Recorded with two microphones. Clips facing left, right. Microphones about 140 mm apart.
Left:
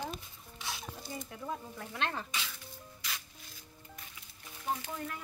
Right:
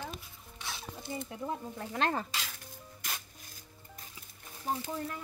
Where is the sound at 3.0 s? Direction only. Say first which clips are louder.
Right 2 dB; 50° right (ahead or behind).